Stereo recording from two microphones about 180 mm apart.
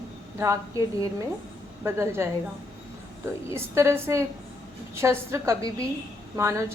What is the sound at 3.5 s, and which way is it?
A woman's voice, 15° right (ahead or behind).